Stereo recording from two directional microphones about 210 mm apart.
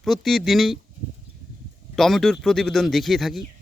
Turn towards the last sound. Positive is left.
turn(degrees=0)  # may be behind; listen again after turning